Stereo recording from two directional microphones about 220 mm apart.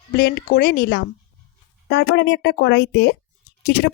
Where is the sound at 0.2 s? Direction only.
45° left (ahead or behind).